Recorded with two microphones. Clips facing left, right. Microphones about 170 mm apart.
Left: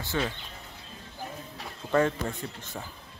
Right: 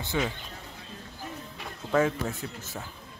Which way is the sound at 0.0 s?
15° right (ahead or behind).